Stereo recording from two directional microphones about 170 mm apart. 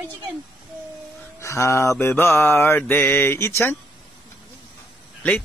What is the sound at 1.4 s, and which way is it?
Mantra, 15° left (ahead or behind).